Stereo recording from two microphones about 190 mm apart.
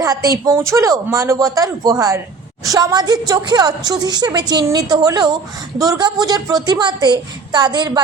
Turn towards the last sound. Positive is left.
turn(degrees=-20)  # may be behind; listen again after turning